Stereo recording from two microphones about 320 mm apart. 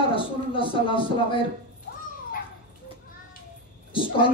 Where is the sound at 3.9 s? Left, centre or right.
Centre.